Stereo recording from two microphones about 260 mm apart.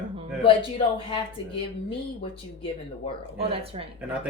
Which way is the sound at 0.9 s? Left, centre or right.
Left.